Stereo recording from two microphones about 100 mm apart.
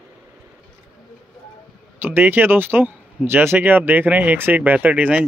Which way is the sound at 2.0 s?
20° right (ahead or behind).